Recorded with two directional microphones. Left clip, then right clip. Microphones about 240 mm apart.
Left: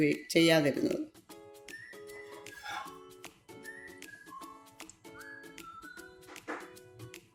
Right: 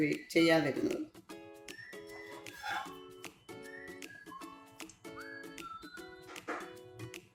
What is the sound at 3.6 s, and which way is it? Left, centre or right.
Music, centre.